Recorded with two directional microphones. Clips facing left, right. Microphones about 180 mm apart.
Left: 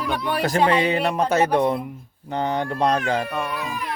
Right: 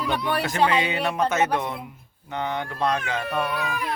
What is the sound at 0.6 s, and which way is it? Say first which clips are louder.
Speech: left 4 dB; 35° left (ahead or behind).